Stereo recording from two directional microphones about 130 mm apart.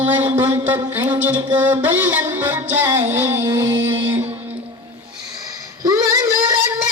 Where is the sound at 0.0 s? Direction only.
15° right (ahead or behind).